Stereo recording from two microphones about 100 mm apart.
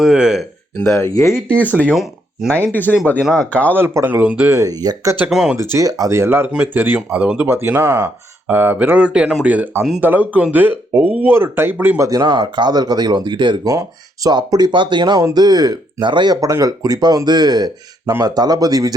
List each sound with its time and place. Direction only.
0.0 s speech: 5° right (ahead or behind)
0.8 s speech: 20° left (ahead or behind)
1.0 s speech: 30° left (ahead or behind)
1.5 s speech: 15° left (ahead or behind)
2.9 s speech: 5° right (ahead or behind)
3.3 s speech: 15° left (ahead or behind)
3.7 s speech: 20° right (ahead or behind)
4.5 s speech: 40° right (ahead or behind)
5.3 s speech: 5° right (ahead or behind)
5.7 s speech: 35° right (ahead or behind); by 11.9 s 20° right (ahead or behind)
11.9 s speech: 35° right (ahead or behind)
13.7 s speech: 35° right (ahead or behind)